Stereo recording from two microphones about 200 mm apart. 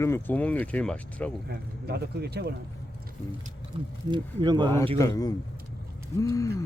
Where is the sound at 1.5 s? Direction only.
55° right (ahead or behind).